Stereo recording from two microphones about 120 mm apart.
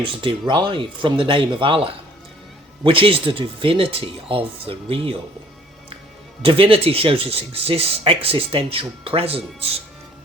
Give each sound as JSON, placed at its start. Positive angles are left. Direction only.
{"t": 0.2, "sound": "speech", "side_deg": -45}
{"t": 6.4, "sound": "speech", "side_deg": -50}